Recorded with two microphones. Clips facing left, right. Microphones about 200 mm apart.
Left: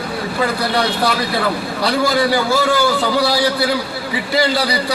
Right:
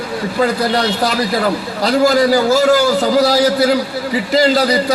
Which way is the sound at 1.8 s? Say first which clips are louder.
Right 5 dB; 40° right (ahead or behind).